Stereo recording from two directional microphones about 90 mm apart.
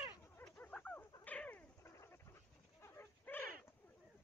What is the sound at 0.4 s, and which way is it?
Dog, 15° left (ahead or behind).